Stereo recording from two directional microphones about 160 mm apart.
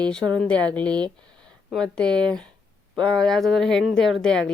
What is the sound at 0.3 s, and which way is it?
A woman's voice, 5° left (ahead or behind).